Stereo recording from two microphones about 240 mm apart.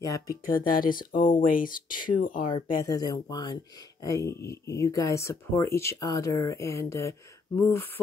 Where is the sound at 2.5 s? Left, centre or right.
Centre.